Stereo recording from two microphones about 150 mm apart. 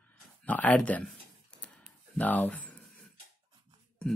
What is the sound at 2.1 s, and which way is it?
Speech, 10° left (ahead or behind).